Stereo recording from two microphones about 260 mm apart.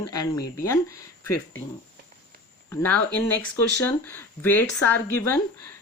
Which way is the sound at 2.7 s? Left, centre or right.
Centre.